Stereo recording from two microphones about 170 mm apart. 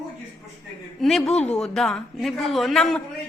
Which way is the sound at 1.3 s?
40° left (ahead or behind).